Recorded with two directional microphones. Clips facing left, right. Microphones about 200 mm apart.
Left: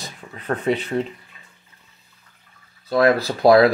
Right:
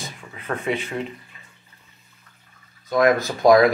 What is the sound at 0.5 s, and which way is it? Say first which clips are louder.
Speech: left 4 dB; 35° left (ahead or behind).